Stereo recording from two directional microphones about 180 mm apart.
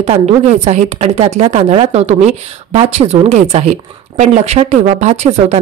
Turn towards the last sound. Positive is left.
turn(degrees=-40)  # may be behind; listen again after turning